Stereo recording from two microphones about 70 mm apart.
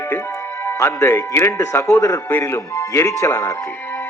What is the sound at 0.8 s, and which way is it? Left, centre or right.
Speech, left.